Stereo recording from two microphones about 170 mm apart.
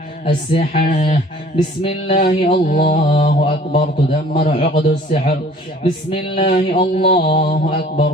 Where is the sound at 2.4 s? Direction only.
55° left (ahead or behind).